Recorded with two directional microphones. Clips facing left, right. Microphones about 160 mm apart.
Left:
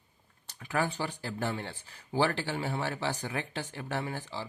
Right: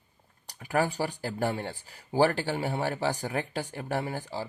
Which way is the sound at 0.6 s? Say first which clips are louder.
Right 4 dB; 40° right (ahead or behind).